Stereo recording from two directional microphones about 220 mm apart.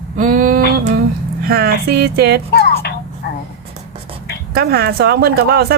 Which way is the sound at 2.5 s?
45° left (ahead or behind).